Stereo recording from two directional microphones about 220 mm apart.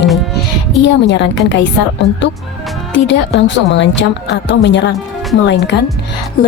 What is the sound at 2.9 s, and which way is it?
A woman's voice, 55° left (ahead or behind).